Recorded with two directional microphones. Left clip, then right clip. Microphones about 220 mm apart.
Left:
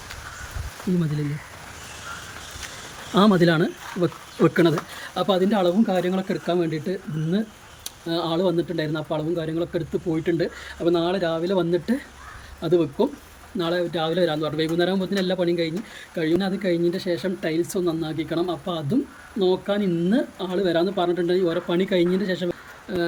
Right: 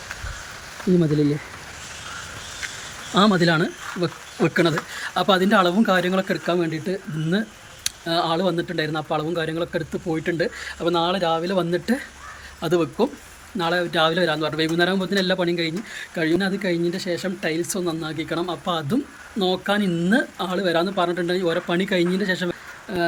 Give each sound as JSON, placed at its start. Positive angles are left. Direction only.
{"t": 3.2, "sound": "speech", "side_deg": 10}